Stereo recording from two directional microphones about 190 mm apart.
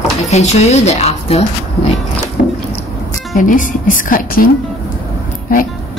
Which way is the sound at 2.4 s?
40° left (ahead or behind).